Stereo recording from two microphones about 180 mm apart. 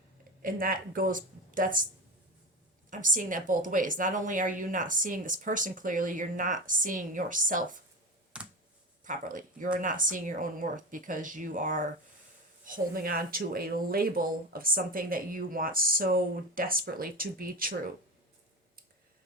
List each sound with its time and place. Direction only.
0.4 s speech: 50° right (ahead or behind)
2.9 s speech: 50° right (ahead or behind)
8.3 s finger snapping: 5° right (ahead or behind)
9.0 s speech: 45° right (ahead or behind)